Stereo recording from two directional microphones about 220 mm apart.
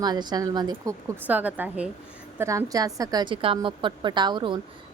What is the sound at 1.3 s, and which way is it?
A woman's voice, 5° right (ahead or behind).